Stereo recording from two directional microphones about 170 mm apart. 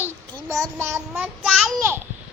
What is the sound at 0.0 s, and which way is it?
Child singing, 20° right (ahead or behind).